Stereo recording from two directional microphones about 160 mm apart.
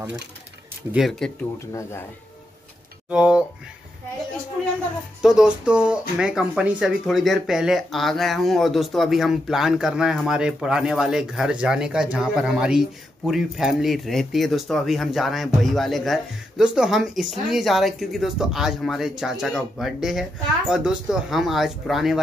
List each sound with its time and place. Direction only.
0.9 s speech: centre (ahead or behind)
1.7 s speech: 20° left (ahead or behind)
3.1 s speech: 5° right (ahead or behind)
5.2 s speech: 5° right (ahead or behind)